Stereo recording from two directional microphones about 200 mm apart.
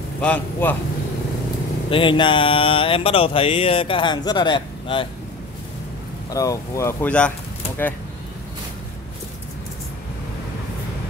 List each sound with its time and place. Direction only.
0.2 s a man's voice: 10° left (ahead or behind)
1.9 s a sound: 25° left (ahead or behind)
6.3 s speech: 15° left (ahead or behind)